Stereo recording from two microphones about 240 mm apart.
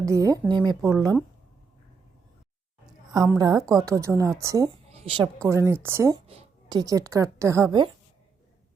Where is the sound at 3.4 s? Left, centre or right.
Centre.